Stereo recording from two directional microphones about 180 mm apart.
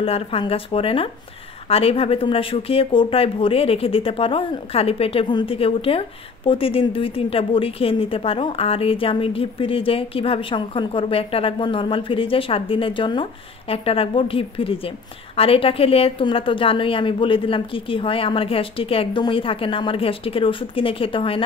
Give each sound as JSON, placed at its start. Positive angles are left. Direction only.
{"t": 0.0, "sound": "a woman's voice", "side_deg": 30}